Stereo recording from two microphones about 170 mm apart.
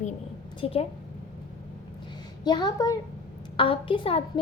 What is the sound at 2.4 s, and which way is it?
A woman's voice, 25° left (ahead or behind).